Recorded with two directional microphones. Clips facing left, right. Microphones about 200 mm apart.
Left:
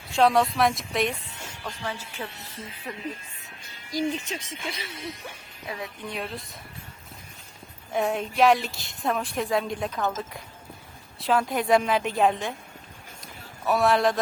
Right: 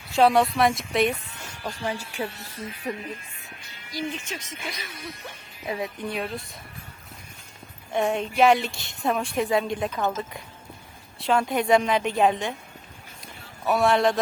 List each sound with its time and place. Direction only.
0.2 s a woman's voice: centre (ahead or behind)
1.6 s a woman's voice: 15° right (ahead or behind)
3.9 s speech: 35° left (ahead or behind)
5.6 s a woman's voice: 20° right (ahead or behind)
6.1 s a woman's voice: centre (ahead or behind)
7.9 s a woman's voice: centre (ahead or behind)
13.2 s a sound: centre (ahead or behind)